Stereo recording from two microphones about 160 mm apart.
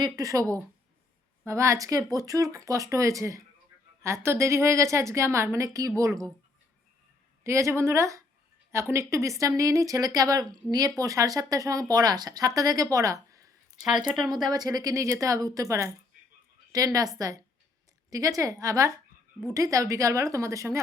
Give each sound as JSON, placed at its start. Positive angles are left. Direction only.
{"t": 0.0, "sound": "a woman's voice", "side_deg": -20}
{"t": 1.5, "sound": "a woman's voice", "side_deg": -20}
{"t": 7.4, "sound": "a woman's voice", "side_deg": -15}
{"t": 14.5, "sound": "a woman's voice", "side_deg": -25}